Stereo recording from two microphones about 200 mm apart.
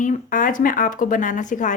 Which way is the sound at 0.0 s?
40° left (ahead or behind).